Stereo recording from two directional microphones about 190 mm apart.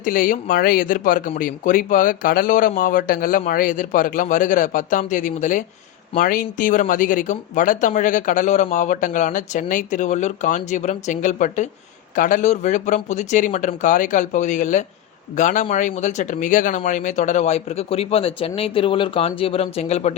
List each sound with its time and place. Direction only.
0.0 s speech: 45° left (ahead or behind)